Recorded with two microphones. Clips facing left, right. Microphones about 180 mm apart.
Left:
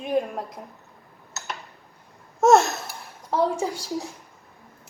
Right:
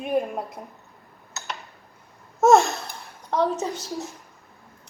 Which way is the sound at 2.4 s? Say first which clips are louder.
Even; centre (ahead or behind).